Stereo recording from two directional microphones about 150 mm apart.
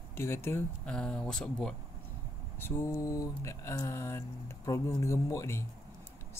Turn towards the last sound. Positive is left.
turn(degrees=20)  # may be behind; listen again after turning